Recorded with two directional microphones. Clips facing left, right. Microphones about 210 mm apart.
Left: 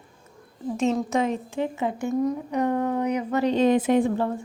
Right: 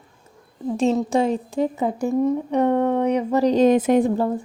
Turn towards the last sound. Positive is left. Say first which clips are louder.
# right 3 dB
turn(degrees=-40)  # may be behind; listen again after turning